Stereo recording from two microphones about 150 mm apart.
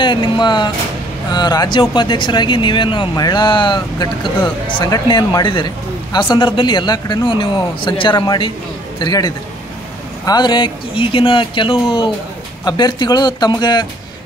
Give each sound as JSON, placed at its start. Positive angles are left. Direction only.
{"t": 0.0, "sound": "speech", "side_deg": 30}